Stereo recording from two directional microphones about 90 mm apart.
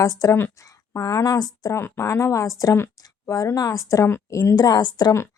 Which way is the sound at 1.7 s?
25° left (ahead or behind).